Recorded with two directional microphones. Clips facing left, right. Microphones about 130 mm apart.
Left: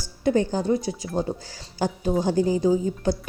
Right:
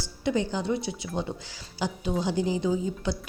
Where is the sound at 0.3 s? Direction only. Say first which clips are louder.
Left 5 dB; 45° left (ahead or behind).